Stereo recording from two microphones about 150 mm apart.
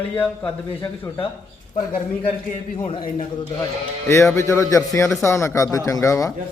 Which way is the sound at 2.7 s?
35° left (ahead or behind).